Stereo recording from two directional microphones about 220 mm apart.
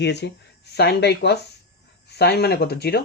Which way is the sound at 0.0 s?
50° left (ahead or behind).